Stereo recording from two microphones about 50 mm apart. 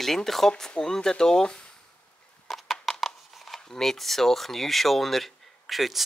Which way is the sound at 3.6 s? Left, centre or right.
Centre.